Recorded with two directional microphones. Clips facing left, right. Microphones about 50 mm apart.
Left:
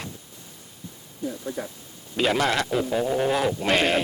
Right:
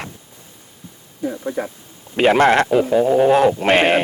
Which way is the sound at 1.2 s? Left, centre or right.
Right.